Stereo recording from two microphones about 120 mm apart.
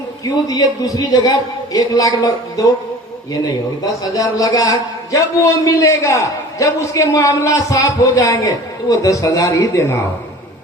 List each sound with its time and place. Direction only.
0.4 s speech: 30° left (ahead or behind)
4.0 s a man's voice: 30° left (ahead or behind)